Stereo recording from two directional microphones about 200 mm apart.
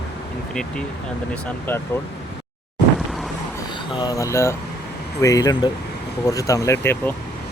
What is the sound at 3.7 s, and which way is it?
Speech, 20° left (ahead or behind).